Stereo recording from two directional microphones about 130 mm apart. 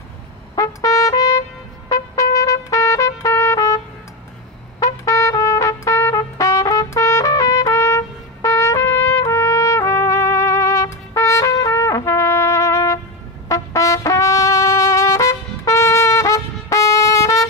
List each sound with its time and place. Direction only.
0.6 s trumpet: 25° left (ahead or behind)